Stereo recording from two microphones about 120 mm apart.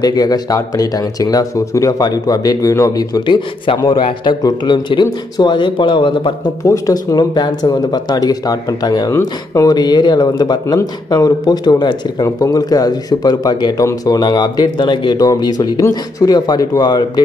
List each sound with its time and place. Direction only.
0.0 s speech: 30° left (ahead or behind)
6.6 s speech: 30° left (ahead or behind)